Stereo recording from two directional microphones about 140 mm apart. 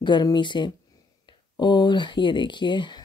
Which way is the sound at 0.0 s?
30° left (ahead or behind).